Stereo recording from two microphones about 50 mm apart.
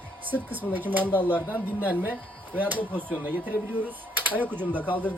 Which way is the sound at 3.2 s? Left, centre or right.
Right.